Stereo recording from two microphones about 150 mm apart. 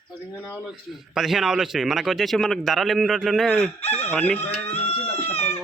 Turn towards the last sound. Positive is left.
turn(degrees=40)  # may be behind; listen again after turning